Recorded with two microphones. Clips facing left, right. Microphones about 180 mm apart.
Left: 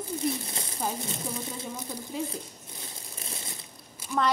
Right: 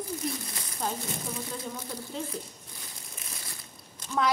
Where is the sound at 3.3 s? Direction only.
25° left (ahead or behind).